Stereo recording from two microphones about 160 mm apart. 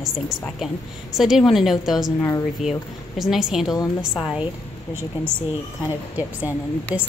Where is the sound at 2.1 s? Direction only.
15° left (ahead or behind).